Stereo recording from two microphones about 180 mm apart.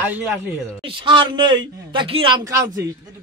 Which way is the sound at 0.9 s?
25° right (ahead or behind).